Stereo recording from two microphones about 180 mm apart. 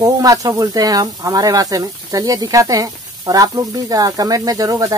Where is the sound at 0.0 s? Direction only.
20° right (ahead or behind).